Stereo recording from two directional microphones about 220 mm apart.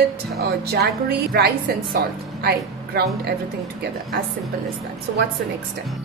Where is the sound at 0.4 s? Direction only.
45° right (ahead or behind).